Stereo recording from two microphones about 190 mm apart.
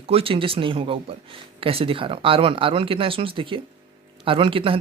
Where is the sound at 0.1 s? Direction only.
30° right (ahead or behind).